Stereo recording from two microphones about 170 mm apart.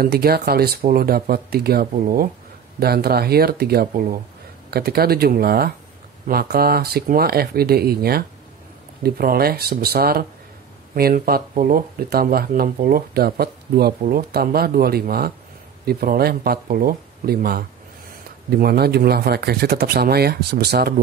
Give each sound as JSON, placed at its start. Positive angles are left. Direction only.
{"t": 0.0, "sound": "speech", "side_deg": -65}